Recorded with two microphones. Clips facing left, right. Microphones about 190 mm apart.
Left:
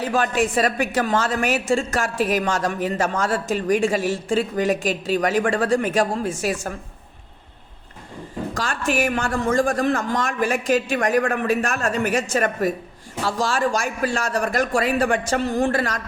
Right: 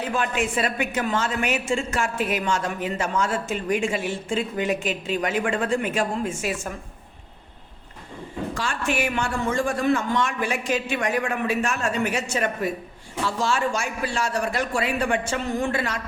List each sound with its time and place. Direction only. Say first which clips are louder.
0.2 s speech: left 5 dB; 40° left (ahead or behind)
8.5 s a man's voice: left 4 dB; 40° left (ahead or behind)